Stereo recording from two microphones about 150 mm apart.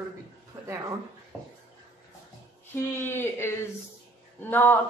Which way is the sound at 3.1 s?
15° left (ahead or behind).